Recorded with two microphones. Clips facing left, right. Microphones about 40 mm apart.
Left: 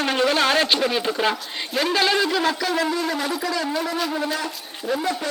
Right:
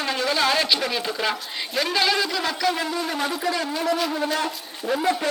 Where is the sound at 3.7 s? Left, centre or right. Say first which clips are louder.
Right 1 dB; centre.